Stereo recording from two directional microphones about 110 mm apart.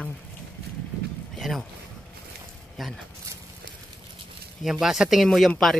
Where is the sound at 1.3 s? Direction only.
Centre (ahead or behind).